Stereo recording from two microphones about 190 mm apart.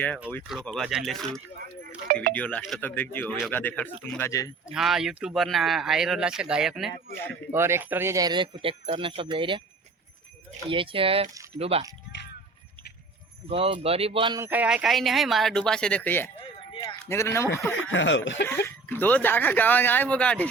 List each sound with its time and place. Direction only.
0.4 s speech: centre (ahead or behind); by 4.5 s 15° left (ahead or behind)
4.6 s speech: centre (ahead or behind)
7.5 s speech: 15° right (ahead or behind)
10.7 s speech: 25° right (ahead or behind)
13.5 s speech: 25° right (ahead or behind)
14.3 s speech: 10° right (ahead or behind); by 16.3 s 10° left (ahead or behind)
16.7 s a sound: 15° left (ahead or behind)
17.7 s speech: 85° left
18.4 s speech: 10° left (ahead or behind)